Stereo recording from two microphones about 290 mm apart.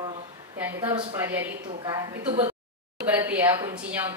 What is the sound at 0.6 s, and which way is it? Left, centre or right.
Speech, centre.